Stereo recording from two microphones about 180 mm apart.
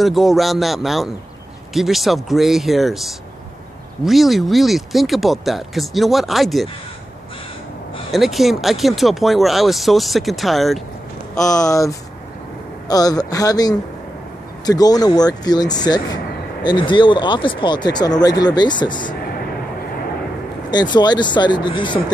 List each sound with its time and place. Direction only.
0.0 s speech: centre (ahead or behind)
8.1 s speech: centre (ahead or behind)
11.4 s speech: 20° left (ahead or behind)
20.7 s speech: 25° left (ahead or behind)